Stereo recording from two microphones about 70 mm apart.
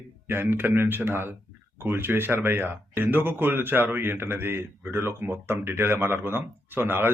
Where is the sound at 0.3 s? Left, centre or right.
Right.